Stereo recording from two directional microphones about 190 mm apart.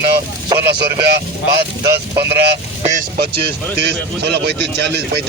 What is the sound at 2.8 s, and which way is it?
Speech, 40° right (ahead or behind).